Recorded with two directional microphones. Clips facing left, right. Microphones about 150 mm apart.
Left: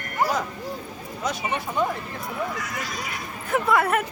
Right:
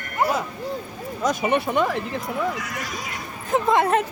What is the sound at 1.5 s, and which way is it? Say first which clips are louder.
Speech: right 3 dB; 85° right.